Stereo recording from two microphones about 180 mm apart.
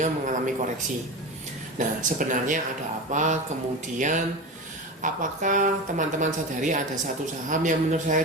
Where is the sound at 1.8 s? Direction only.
45° right (ahead or behind).